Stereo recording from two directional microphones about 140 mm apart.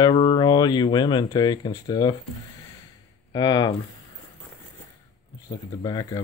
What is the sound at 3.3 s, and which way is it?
Speech, 30° left (ahead or behind).